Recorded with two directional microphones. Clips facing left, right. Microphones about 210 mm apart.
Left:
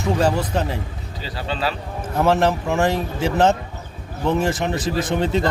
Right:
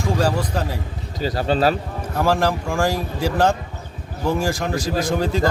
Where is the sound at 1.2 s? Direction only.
45° right (ahead or behind).